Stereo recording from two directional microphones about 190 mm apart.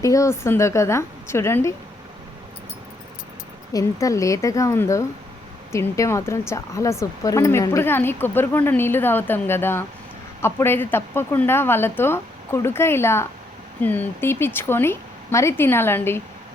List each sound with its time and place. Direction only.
0.0 s a woman's voice: 15° left (ahead or behind)
3.7 s a woman's voice: 20° left (ahead or behind)